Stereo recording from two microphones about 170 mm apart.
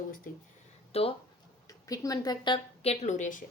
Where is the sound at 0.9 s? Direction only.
35° left (ahead or behind).